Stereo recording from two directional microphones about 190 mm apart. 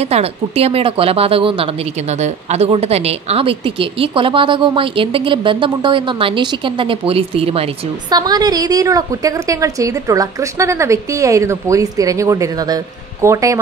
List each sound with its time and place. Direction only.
0.0 s speech: 35° right (ahead or behind)
8.2 s a woman's voice: 20° right (ahead or behind)